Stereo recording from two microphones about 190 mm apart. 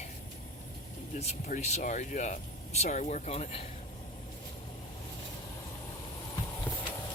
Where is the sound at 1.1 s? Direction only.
35° left (ahead or behind).